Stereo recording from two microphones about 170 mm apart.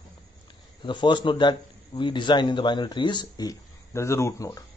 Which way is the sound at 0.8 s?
25° left (ahead or behind).